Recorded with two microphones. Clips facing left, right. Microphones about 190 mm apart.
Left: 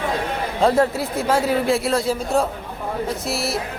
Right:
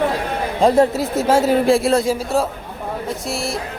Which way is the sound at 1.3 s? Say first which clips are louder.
Right 5 dB; 30° right (ahead or behind).